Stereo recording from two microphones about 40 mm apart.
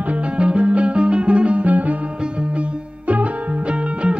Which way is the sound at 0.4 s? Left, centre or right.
Right.